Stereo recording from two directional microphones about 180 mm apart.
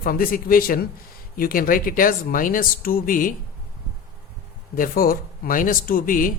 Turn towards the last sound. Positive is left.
turn(degrees=50)  # may be behind; listen again after turning